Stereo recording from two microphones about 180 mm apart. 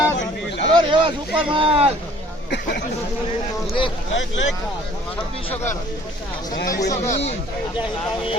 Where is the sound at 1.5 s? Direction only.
30° right (ahead or behind).